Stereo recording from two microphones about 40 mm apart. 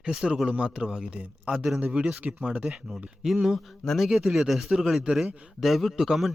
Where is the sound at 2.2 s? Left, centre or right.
Right.